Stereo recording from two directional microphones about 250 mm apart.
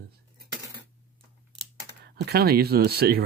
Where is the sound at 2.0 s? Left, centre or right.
Right.